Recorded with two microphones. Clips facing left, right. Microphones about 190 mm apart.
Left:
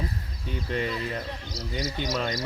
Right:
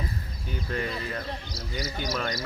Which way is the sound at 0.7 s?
25° left (ahead or behind).